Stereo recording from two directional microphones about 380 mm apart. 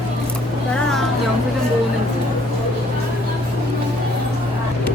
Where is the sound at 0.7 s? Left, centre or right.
Centre.